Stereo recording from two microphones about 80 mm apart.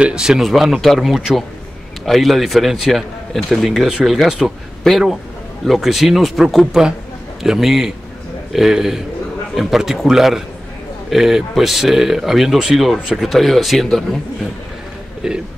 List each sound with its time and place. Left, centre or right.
0.0 s speech: centre
15.2 s speech: centre